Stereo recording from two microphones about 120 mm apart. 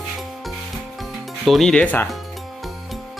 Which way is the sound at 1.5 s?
Centre (ahead or behind).